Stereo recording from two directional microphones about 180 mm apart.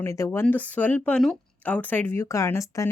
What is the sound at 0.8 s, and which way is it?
Speech, 10° left (ahead or behind).